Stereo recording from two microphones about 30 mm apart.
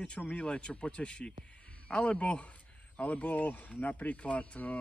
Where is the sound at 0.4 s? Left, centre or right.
Left.